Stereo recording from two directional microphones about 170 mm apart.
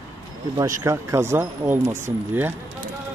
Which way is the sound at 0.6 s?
20° right (ahead or behind).